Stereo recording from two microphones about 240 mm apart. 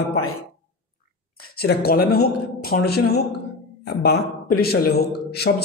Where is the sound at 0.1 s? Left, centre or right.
Left.